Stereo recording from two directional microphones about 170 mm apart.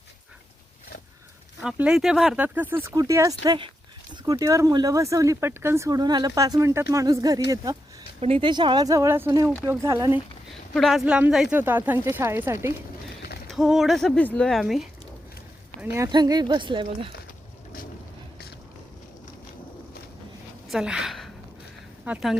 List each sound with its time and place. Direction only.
1.6 s speech: 5° right (ahead or behind); by 7.8 s 20° right (ahead or behind)
8.2 s speech: 30° right (ahead or behind)
10.8 s a woman's voice: centre (ahead or behind)
13.5 s a woman's voice: centre (ahead or behind)
15.8 s speech: 15° right (ahead or behind)
16.1 s speech: 25° right (ahead or behind)
20.7 s a sound: 5° right (ahead or behind)
22.0 s speech: 5° right (ahead or behind)